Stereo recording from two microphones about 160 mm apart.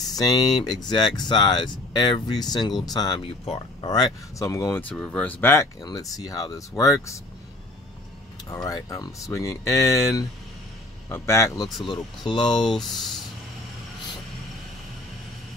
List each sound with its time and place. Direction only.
0.1 s speech: 25° left (ahead or behind)
8.6 s speech: 20° left (ahead or behind)
12.6 s speech: centre (ahead or behind)